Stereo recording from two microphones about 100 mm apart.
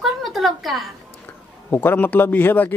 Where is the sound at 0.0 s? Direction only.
Centre (ahead or behind).